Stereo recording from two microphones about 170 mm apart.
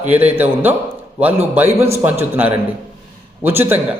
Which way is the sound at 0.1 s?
10° right (ahead or behind).